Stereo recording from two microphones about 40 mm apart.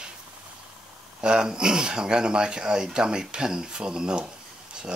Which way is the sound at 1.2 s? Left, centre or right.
Centre.